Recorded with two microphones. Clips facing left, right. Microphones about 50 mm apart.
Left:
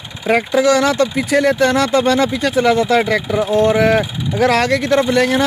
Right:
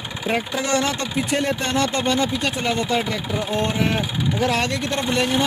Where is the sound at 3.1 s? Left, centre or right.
Left.